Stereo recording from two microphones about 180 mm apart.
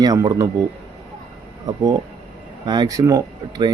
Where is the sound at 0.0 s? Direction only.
20° right (ahead or behind).